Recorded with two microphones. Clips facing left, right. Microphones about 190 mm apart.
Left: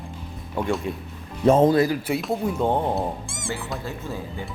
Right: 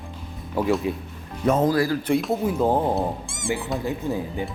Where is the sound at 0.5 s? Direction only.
5° right (ahead or behind).